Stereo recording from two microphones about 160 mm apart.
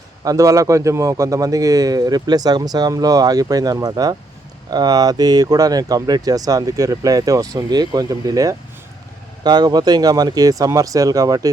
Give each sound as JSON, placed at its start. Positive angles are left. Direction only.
{"t": 0.3, "sound": "a man's voice", "side_deg": -20}